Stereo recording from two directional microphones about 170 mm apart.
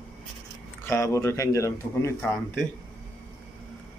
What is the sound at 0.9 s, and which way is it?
Speech, 15° left (ahead or behind).